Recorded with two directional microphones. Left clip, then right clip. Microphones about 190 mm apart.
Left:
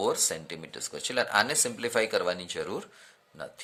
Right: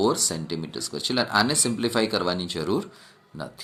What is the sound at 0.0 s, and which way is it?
Speech, 30° left (ahead or behind).